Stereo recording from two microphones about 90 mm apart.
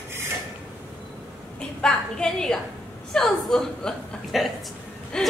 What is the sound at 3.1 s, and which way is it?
A woman's voice, 5° left (ahead or behind).